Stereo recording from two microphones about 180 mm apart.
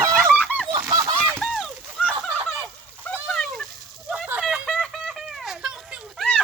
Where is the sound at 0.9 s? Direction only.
20° right (ahead or behind).